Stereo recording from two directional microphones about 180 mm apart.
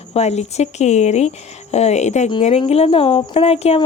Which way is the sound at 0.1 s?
35° left (ahead or behind).